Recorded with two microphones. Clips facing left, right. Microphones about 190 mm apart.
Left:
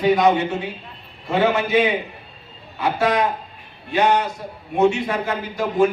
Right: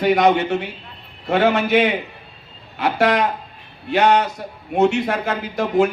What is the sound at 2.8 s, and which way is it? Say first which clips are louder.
A man's voice: right 2 dB; 70° right (ahead or behind).